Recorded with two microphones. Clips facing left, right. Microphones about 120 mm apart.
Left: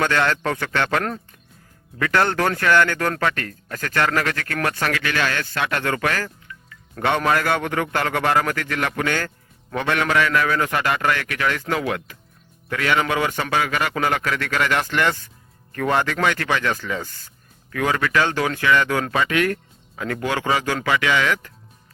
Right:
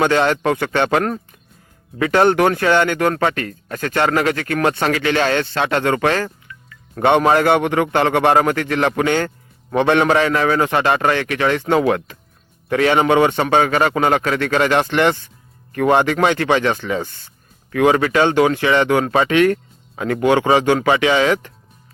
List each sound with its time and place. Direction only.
0.0 s a man's voice: 20° right (ahead or behind)